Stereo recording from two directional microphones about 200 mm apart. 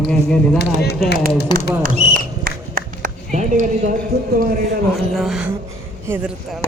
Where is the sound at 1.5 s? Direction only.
20° left (ahead or behind).